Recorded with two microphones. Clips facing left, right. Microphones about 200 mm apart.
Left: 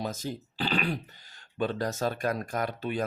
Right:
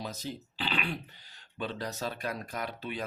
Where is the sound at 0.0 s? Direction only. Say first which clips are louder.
Left 5 dB; 45° left (ahead or behind).